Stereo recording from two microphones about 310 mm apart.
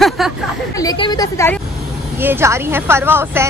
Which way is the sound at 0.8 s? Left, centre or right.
Centre.